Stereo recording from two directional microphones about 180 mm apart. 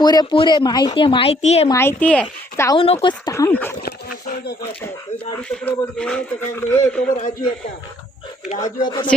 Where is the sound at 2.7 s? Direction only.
30° left (ahead or behind).